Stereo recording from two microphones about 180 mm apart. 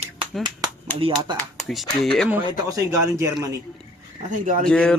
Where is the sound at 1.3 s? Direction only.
Centre (ahead or behind).